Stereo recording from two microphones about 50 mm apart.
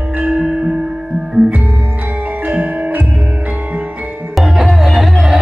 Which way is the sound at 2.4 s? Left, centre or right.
Right.